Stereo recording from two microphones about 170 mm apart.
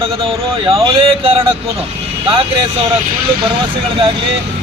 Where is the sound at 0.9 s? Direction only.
35° right (ahead or behind).